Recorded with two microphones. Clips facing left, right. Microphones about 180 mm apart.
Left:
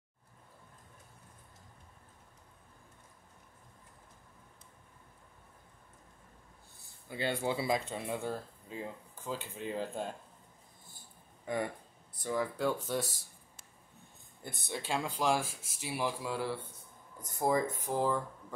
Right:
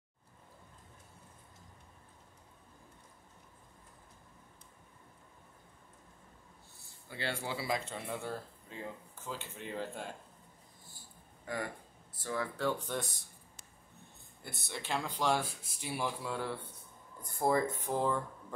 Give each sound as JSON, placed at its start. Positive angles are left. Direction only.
{"t": 7.1, "sound": "speech", "side_deg": 20}
{"t": 11.4, "sound": "speech", "side_deg": 20}
{"t": 14.4, "sound": "speech", "side_deg": 15}
{"t": 17.9, "sound": "speech", "side_deg": -10}